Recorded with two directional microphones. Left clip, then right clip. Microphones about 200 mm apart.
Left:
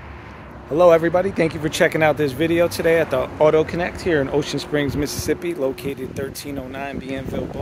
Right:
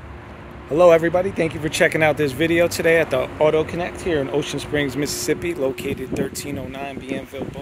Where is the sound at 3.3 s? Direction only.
15° left (ahead or behind).